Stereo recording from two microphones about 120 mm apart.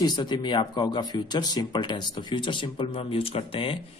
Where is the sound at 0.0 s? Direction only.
35° left (ahead or behind).